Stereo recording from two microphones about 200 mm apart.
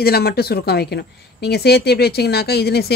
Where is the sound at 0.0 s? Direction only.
50° left (ahead or behind).